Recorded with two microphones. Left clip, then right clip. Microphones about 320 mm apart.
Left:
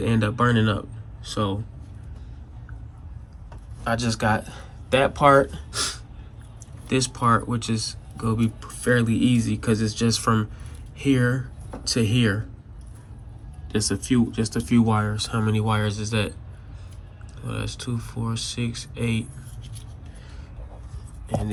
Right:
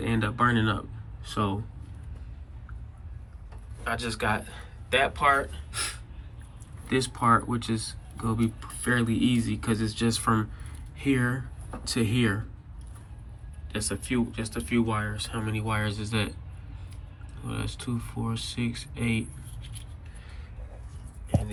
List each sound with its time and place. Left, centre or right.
0.0 s speech: centre
3.8 s speech: centre
6.8 s speech: centre
13.7 s speech: centre
17.4 s speech: centre